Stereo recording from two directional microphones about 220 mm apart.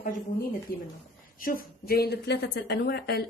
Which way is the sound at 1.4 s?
40° left (ahead or behind).